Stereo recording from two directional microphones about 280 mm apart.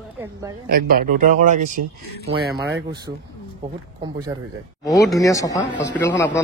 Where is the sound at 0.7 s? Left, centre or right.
Right.